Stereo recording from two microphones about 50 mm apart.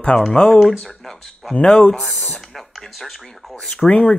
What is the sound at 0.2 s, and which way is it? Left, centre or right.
Speech, centre.